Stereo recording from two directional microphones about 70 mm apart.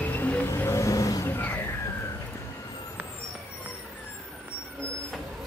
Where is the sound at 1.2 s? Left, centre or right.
Left.